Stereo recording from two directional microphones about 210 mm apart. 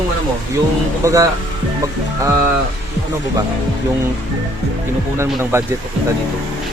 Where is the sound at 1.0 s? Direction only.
15° right (ahead or behind).